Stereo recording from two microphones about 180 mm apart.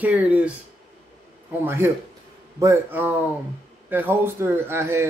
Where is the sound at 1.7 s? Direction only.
15° right (ahead or behind).